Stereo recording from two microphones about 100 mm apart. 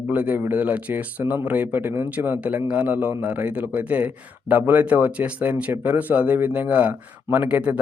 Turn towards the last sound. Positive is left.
turn(degrees=-15)  # may be behind; listen again after turning